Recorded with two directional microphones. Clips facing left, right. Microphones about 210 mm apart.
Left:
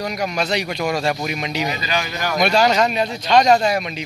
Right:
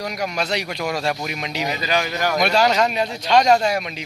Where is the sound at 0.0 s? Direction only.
Centre (ahead or behind).